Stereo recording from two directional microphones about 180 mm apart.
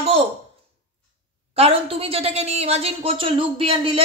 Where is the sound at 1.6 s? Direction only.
30° right (ahead or behind).